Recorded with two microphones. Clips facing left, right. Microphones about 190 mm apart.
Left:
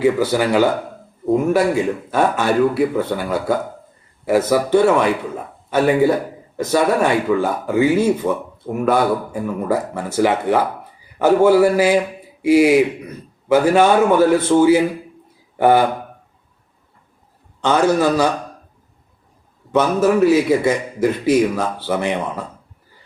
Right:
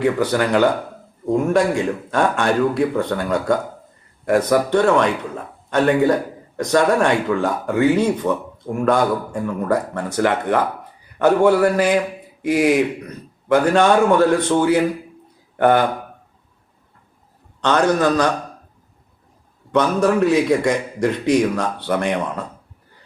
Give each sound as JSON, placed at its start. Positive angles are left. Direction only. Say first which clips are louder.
{"t": 0.0, "sound": "a man's voice", "louder": "left 2 dB", "side_deg": 5}
{"t": 17.6, "sound": "speech", "louder": "left 1 dB", "side_deg": 5}
{"t": 19.7, "sound": "a man's voice", "louder": "left 1 dB", "side_deg": 5}